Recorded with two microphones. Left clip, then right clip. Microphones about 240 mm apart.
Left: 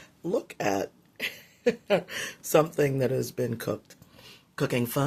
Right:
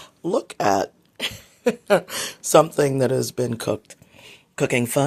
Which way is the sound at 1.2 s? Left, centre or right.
Right.